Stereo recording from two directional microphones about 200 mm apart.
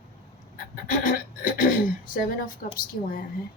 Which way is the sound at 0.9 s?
40° left (ahead or behind).